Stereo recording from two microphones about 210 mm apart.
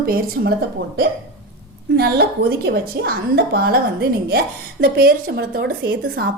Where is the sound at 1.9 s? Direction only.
50° right (ahead or behind).